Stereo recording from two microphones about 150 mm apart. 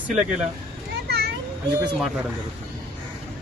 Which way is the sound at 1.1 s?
90° right.